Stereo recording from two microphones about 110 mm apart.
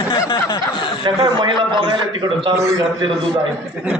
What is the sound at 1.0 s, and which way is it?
A man's voice, 45° right (ahead or behind).